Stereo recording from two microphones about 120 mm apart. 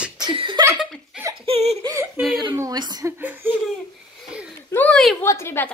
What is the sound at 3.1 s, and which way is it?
Speech, 15° right (ahead or behind).